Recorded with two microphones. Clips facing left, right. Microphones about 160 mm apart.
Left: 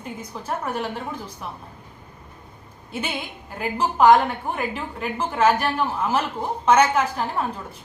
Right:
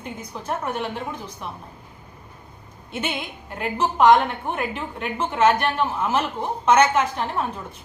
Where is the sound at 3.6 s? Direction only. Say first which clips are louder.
Even; 5° left (ahead or behind).